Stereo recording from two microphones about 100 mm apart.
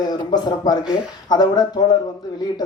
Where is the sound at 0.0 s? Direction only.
45° left (ahead or behind).